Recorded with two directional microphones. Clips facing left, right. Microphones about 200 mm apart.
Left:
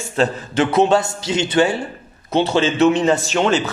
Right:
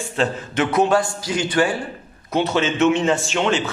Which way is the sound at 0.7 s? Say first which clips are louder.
Left 2 dB; 25° left (ahead or behind).